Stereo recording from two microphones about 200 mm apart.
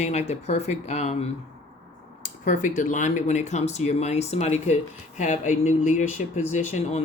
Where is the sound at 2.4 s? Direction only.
40° left (ahead or behind).